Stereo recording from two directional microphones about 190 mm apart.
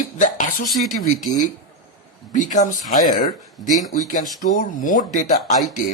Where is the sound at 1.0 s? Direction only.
40° left (ahead or behind).